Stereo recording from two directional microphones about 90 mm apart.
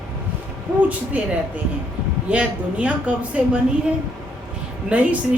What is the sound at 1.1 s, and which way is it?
A woman's voice, 15° right (ahead or behind).